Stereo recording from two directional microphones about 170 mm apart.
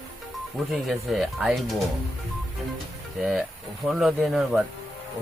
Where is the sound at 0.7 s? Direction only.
Centre (ahead or behind).